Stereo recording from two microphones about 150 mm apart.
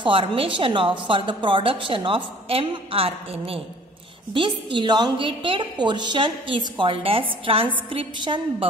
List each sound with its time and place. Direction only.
0.0 s a woman's voice: 35° right (ahead or behind)